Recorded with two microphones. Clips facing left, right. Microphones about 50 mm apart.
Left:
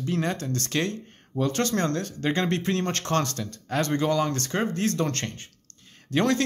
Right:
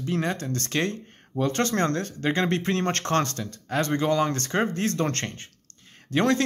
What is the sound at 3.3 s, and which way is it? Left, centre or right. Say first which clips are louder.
Speech: even; centre.